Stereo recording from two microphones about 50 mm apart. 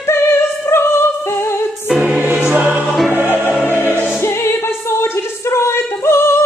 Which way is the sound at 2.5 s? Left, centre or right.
Right.